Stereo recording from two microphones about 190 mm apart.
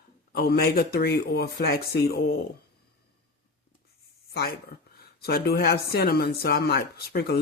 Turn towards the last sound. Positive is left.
turn(degrees=60)  # may be behind; listen again after turning